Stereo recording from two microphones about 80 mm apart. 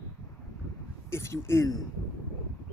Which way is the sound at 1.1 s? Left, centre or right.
Left.